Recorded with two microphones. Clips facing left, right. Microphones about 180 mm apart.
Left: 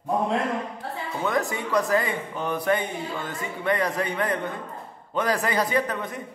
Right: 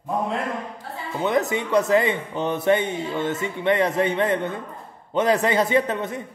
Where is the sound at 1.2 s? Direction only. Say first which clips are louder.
Right 4 dB; 20° right (ahead or behind).